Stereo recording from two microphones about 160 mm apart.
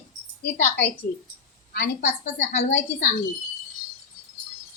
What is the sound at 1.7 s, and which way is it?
Speech, 90° left.